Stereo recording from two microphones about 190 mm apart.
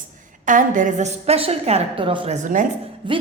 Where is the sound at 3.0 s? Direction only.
25° right (ahead or behind).